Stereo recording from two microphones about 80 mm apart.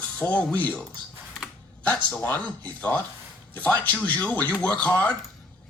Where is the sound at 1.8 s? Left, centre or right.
Left.